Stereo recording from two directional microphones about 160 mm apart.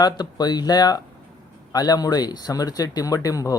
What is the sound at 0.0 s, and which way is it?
Speech, 25° left (ahead or behind).